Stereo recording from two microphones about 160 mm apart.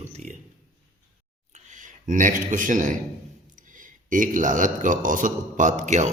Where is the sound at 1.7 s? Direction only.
55° right (ahead or behind).